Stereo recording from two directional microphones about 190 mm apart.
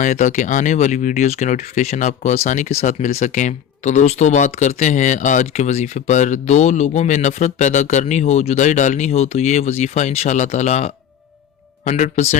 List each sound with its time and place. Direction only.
0.0 s speech: 40° left (ahead or behind)